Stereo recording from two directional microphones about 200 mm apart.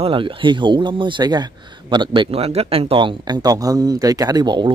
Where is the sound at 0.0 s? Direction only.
25° right (ahead or behind).